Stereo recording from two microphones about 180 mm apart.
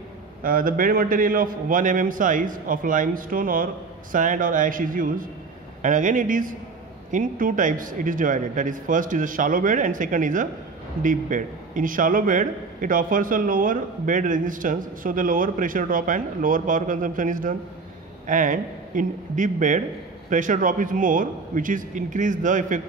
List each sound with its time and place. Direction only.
0.4 s a man's voice: 50° right (ahead or behind)